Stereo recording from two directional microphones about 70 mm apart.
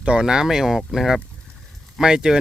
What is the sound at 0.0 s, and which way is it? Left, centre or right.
Speech, centre.